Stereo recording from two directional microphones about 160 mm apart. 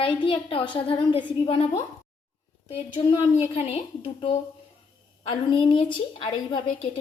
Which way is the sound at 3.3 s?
40° left (ahead or behind).